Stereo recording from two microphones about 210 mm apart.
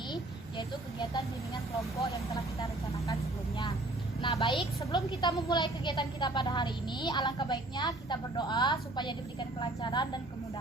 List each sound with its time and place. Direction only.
1.8 s speech: 15° left (ahead or behind)
4.2 s a woman's voice: 25° left (ahead or behind)